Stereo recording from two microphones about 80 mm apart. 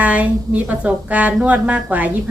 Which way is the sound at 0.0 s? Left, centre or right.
Centre.